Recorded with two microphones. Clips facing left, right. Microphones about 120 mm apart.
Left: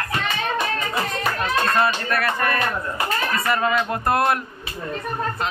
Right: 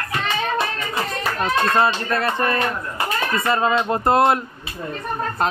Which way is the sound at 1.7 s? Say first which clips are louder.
Right 2 dB; 25° right (ahead or behind).